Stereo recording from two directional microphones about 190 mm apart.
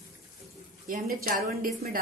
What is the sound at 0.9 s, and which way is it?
A woman's voice, 50° right (ahead or behind).